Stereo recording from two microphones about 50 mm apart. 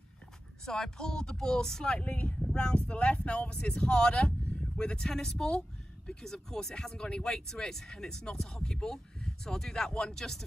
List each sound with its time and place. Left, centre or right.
0.7 s speech: centre
2.0 s speech: left